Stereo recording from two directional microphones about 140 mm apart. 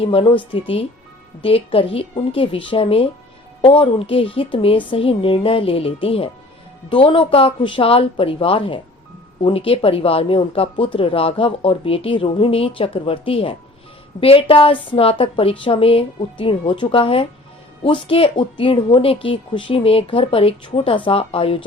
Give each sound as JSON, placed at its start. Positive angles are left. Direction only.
{"t": 0.0, "sound": "speech", "side_deg": 40}